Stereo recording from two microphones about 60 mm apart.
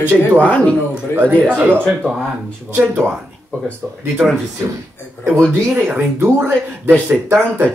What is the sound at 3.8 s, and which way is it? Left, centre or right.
Speech, right.